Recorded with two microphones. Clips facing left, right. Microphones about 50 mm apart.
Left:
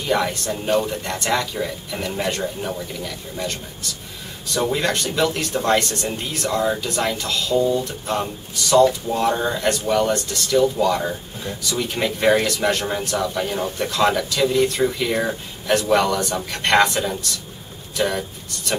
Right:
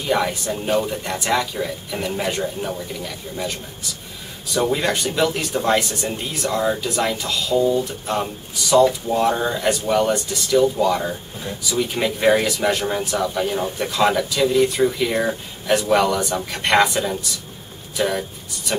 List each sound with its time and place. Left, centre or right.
0.0 s speech: centre